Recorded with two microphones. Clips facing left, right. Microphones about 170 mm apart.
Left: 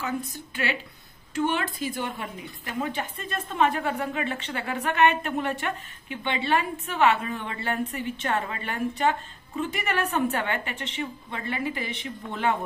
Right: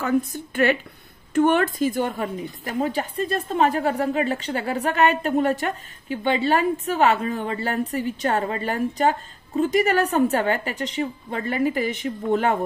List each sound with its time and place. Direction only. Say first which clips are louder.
0.0 s a woman's voice: right 9 dB; 55° right (ahead or behind)